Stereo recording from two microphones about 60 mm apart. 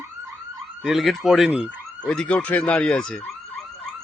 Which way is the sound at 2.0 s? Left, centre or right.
Centre.